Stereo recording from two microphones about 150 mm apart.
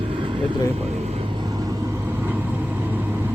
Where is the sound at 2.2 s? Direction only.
15° right (ahead or behind).